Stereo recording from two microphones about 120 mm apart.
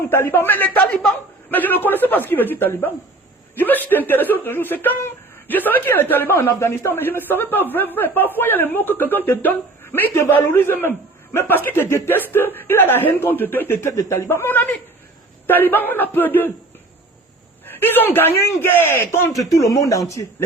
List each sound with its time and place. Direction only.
0.1 s speech: 20° left (ahead or behind)
17.7 s a man's voice: 15° left (ahead or behind)